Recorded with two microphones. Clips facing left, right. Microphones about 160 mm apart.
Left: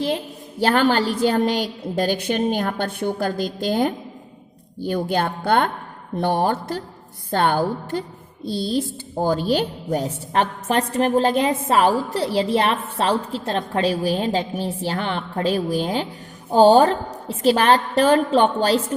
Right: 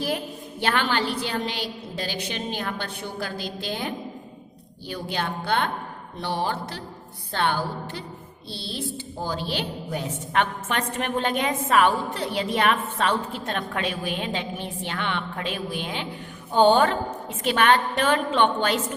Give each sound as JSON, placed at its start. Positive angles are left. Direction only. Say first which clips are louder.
{"t": 0.6, "sound": "a woman's voice", "louder": "left 7 dB", "side_deg": 40}